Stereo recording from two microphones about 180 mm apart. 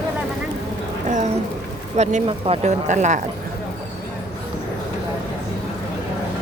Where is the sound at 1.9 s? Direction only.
40° right (ahead or behind).